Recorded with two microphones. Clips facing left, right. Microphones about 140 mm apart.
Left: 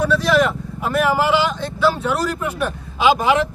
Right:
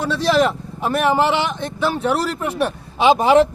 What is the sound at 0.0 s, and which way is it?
Speech, 30° right (ahead or behind).